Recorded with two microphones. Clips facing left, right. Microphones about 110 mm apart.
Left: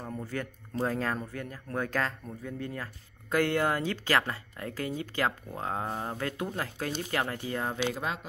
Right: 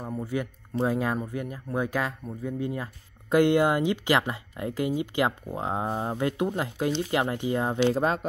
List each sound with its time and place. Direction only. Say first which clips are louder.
0.0 s a sound: right 5 dB; 10° right (ahead or behind)
0.8 s speech: right 4 dB; 15° right (ahead or behind)
7.9 s speech: right 9 dB; 40° right (ahead or behind)